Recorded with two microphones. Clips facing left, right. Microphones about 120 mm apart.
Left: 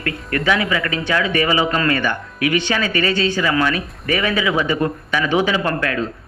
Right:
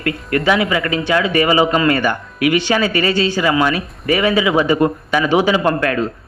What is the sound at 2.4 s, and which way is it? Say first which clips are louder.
Speech: right 4 dB; 30° right (ahead or behind).